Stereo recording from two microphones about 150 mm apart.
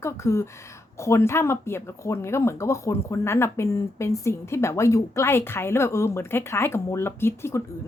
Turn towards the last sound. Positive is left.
turn(degrees=15)  # may be behind; listen again after turning